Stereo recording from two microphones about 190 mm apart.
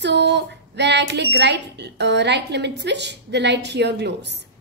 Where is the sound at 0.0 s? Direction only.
65° right (ahead or behind).